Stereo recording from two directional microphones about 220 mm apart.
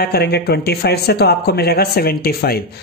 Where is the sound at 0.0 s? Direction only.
45° left (ahead or behind).